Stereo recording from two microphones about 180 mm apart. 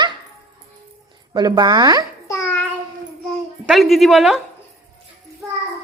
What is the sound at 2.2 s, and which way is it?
Child singing, 15° left (ahead or behind).